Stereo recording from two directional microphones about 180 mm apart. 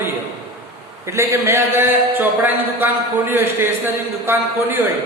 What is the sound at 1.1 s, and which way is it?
A man's voice, 15° right (ahead or behind).